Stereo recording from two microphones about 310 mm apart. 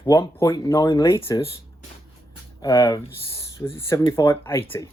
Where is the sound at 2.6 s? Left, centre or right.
Centre.